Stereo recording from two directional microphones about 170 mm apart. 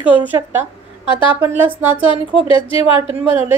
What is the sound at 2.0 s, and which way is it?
Speech, 30° left (ahead or behind).